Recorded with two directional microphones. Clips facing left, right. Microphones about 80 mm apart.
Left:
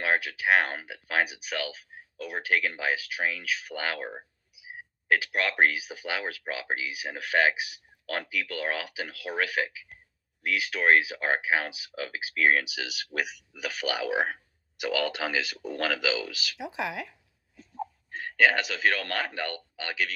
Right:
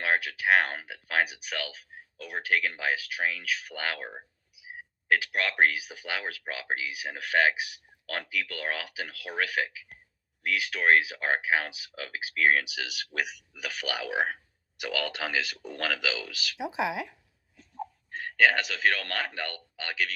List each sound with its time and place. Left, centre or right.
0.0 s a sound: centre
0.4 s speech: centre
3.8 s speech: centre
4.7 s a sound: centre
5.9 s speech: centre
10.4 s speech: centre
11.1 s speech: centre
13.1 s speech: centre
16.7 s speech: right
17.6 s a man's voice: centre